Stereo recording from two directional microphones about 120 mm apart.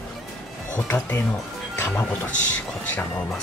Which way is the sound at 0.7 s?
10° left (ahead or behind).